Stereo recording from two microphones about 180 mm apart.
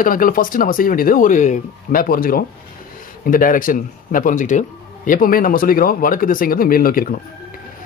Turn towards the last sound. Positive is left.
turn(degrees=55)  # may be behind; listen again after turning